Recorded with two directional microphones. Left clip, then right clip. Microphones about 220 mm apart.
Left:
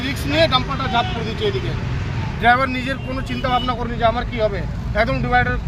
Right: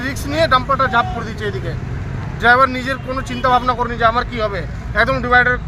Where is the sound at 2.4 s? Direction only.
10° right (ahead or behind).